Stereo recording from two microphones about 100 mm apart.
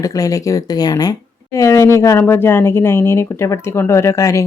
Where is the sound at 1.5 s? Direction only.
30° left (ahead or behind).